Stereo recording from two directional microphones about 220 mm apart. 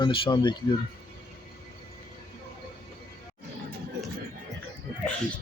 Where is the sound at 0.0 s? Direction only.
20° left (ahead or behind).